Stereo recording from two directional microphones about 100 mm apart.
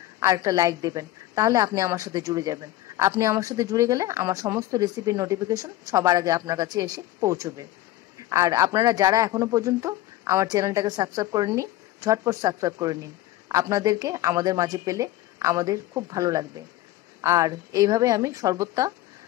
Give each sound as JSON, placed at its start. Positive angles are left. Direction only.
{"t": 0.2, "sound": "a man's voice", "side_deg": -35}